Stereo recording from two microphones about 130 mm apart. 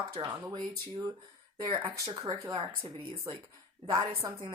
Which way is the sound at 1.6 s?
30° right (ahead or behind).